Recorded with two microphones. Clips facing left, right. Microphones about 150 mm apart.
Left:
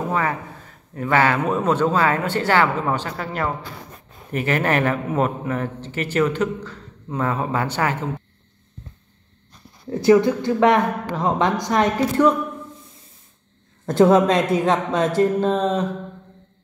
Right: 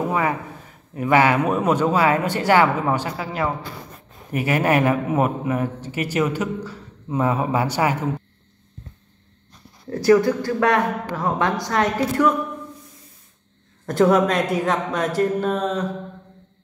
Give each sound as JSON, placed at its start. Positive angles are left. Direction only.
{"t": 0.1, "sound": "speech", "side_deg": -15}
{"t": 9.8, "sound": "a woman's voice", "side_deg": 20}
{"t": 13.8, "sound": "a woman's voice", "side_deg": 25}